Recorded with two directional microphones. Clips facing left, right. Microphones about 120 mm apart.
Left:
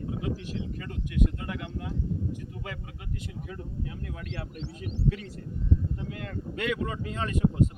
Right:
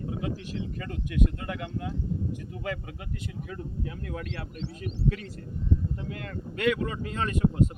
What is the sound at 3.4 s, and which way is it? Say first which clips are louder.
Speech: right 2 dB; 55° right (ahead or behind).